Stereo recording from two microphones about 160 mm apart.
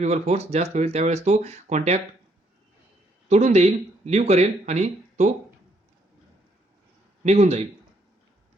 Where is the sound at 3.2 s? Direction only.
45° right (ahead or behind).